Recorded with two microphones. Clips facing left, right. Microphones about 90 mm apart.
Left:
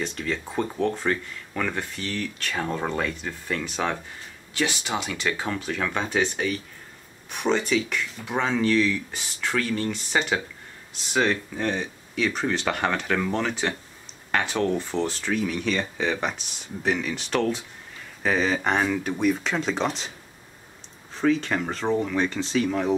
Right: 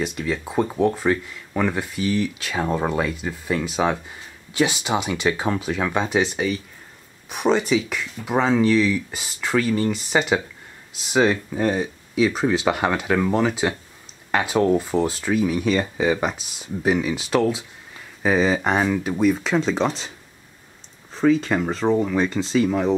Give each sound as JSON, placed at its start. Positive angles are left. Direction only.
{"t": 0.0, "sound": "speech", "side_deg": -10}
{"t": 21.1, "sound": "speech", "side_deg": 0}